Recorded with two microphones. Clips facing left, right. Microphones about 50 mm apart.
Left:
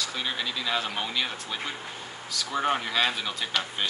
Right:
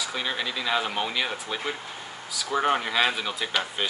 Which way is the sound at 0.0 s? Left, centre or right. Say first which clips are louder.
Right 2 dB; centre.